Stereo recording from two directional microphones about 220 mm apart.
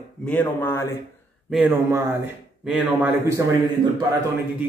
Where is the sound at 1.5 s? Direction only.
10° right (ahead or behind).